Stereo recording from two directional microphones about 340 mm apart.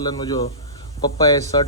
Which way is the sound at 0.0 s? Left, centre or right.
Centre.